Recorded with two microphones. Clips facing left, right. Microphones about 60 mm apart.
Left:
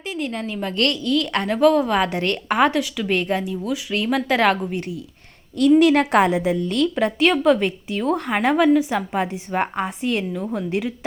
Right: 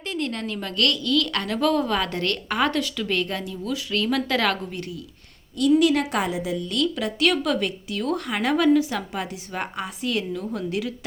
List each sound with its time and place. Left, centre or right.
0.0 s a woman's voice: centre
0.7 s a woman's voice: left
5.5 s a woman's voice: left
7.2 s a woman's voice: left